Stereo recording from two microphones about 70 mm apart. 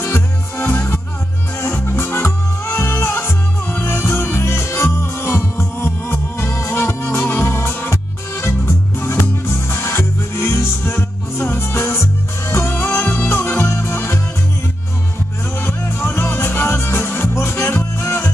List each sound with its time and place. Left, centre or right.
0.0 s music: left
15.6 s music: left